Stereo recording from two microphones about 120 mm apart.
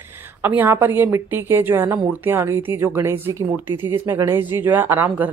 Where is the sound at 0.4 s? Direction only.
15° right (ahead or behind).